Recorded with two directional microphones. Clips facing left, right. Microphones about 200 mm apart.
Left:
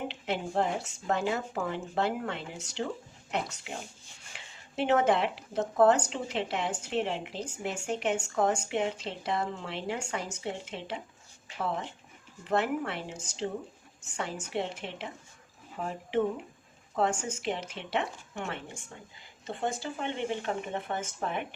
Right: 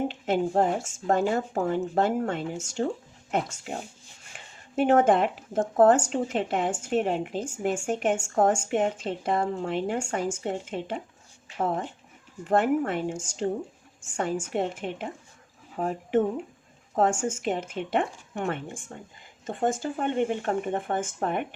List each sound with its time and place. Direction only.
0.0 s speech: 45° right (ahead or behind)